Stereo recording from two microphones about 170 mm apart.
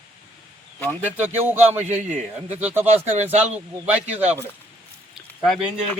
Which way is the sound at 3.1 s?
40° right (ahead or behind).